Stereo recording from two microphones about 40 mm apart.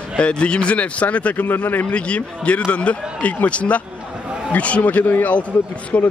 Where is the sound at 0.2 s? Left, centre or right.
Left.